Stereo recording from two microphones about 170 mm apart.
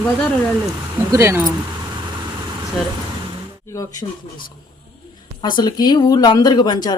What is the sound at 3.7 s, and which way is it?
Speech, 20° left (ahead or behind).